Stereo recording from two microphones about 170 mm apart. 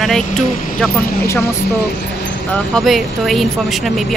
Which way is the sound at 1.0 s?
60° left (ahead or behind).